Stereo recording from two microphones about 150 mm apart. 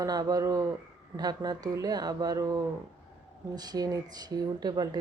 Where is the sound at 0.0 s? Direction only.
25° right (ahead or behind).